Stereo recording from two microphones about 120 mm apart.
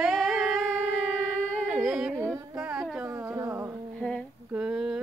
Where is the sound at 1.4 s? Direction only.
10° left (ahead or behind).